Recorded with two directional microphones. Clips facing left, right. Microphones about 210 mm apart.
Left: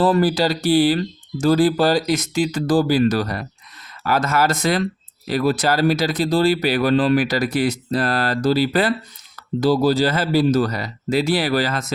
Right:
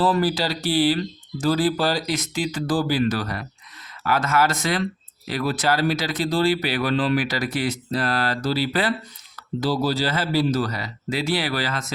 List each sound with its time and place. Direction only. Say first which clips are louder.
0.0 s speech: left 4 dB; 50° left (ahead or behind)